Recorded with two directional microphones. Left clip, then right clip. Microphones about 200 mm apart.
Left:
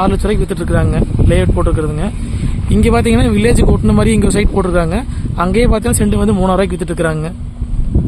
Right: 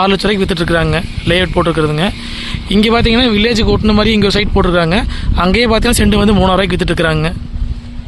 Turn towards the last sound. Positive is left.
turn(degrees=-5)  # may be behind; listen again after turning